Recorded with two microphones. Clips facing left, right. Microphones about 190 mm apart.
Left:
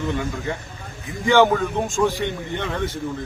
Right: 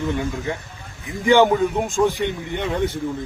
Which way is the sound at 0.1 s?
15° right (ahead or behind).